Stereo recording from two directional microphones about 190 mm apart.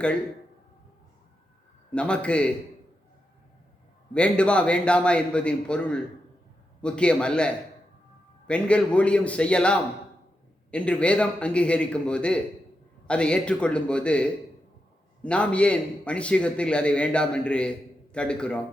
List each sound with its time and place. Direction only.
1.9 s a man's voice: 5° left (ahead or behind)
4.1 s a man's voice: 5° left (ahead or behind)